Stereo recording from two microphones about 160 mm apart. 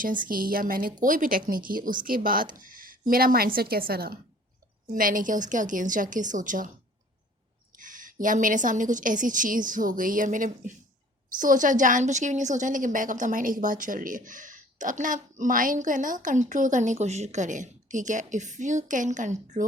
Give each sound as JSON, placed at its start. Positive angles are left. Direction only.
{"t": 0.0, "sound": "a woman's voice", "side_deg": -60}
{"t": 7.8, "sound": "a woman's voice", "side_deg": -55}